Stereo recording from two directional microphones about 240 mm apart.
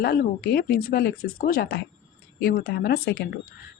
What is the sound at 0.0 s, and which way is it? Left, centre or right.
A woman's voice, left.